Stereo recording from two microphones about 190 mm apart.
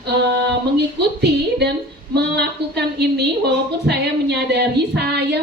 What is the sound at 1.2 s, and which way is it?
Speech, 60° right (ahead or behind).